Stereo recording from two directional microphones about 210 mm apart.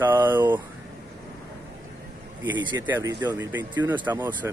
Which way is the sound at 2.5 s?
20° right (ahead or behind).